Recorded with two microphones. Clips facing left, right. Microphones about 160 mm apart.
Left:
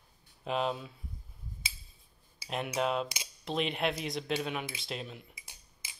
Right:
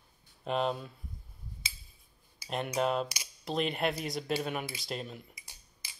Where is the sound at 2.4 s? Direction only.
5° left (ahead or behind).